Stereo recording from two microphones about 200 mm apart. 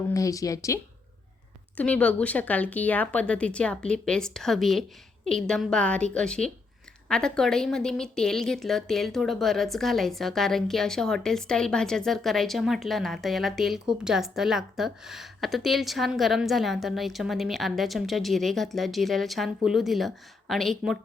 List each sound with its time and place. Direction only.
0.1 s a woman's voice: 15° left (ahead or behind)